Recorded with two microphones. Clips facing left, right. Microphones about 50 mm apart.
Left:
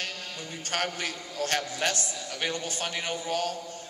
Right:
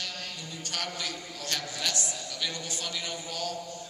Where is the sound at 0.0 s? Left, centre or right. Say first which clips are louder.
Left 2 dB; left.